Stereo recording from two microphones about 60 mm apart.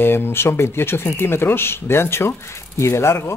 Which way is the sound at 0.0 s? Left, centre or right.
Left.